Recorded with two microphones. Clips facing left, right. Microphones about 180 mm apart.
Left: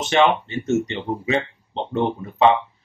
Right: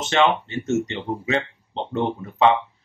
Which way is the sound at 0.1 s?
15° left (ahead or behind).